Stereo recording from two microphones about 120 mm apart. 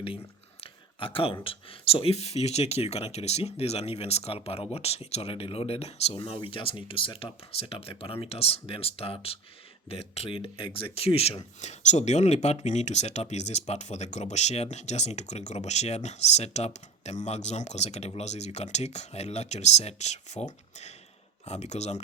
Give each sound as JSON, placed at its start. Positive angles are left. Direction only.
{"t": 0.6, "sound": "speech", "side_deg": 50}
{"t": 11.6, "sound": "speech", "side_deg": 75}
{"t": 21.4, "sound": "speech", "side_deg": 65}